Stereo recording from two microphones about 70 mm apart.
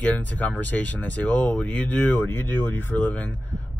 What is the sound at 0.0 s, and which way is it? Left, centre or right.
Speech, left.